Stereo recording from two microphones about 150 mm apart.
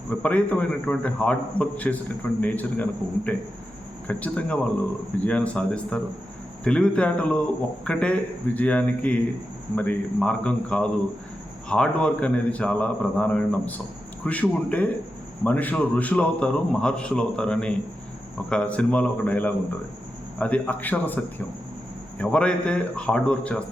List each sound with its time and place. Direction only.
0.1 s a man's voice: 10° left (ahead or behind)